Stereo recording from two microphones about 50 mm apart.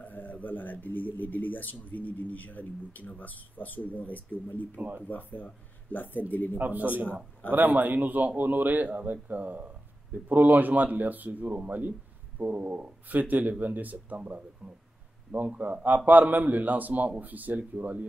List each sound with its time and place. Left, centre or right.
0.0 s speech: left
6.6 s a man's voice: right